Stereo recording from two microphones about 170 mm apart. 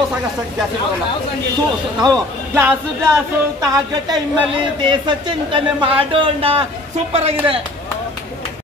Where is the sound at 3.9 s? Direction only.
25° right (ahead or behind).